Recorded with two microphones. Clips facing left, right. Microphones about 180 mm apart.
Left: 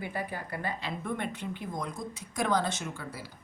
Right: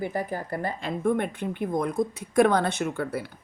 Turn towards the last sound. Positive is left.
turn(degrees=-60)  # may be behind; listen again after turning